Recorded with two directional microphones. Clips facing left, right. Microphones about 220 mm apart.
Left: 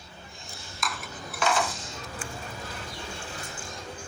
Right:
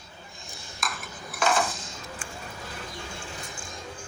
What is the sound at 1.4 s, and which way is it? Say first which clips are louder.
Dishes: right 2 dB; 50° right (ahead or behind).